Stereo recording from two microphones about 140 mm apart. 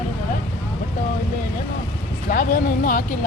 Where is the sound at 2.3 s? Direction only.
90° left.